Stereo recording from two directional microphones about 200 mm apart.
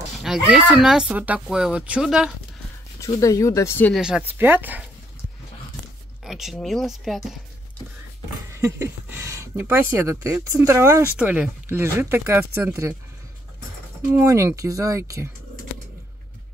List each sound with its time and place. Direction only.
0.2 s speech: 5° right (ahead or behind)
3.0 s speech: 15° left (ahead or behind)
4.0 s speech: 5° right (ahead or behind)
6.2 s speech: centre (ahead or behind)
8.5 s speech: 15° right (ahead or behind)
14.1 s speech: 15° right (ahead or behind)